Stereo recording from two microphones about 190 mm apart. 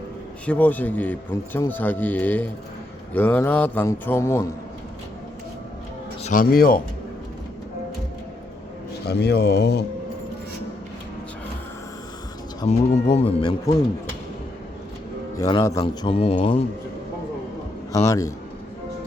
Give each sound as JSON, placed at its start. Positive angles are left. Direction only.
{"t": 0.4, "sound": "speech", "side_deg": 10}
{"t": 6.2, "sound": "speech", "side_deg": 45}
{"t": 9.0, "sound": "speech", "side_deg": 60}
{"t": 12.6, "sound": "speech", "side_deg": 35}
{"t": 15.4, "sound": "a man's voice", "side_deg": 20}
{"t": 17.9, "sound": "speech", "side_deg": 15}